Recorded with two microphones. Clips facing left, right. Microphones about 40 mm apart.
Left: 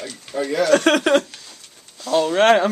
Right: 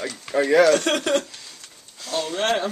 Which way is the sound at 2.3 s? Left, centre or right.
Left.